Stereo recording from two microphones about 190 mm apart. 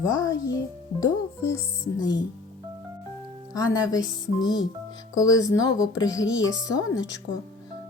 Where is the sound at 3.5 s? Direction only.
20° left (ahead or behind).